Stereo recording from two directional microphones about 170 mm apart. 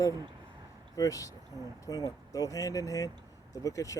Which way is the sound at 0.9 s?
20° left (ahead or behind).